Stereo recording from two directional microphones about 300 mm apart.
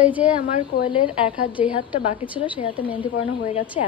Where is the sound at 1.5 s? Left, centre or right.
Centre.